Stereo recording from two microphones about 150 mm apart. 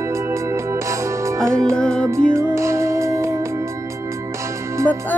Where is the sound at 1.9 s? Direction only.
20° right (ahead or behind).